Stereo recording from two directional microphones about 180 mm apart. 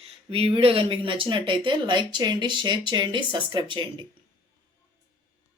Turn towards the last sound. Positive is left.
turn(degrees=-25)  # may be behind; listen again after turning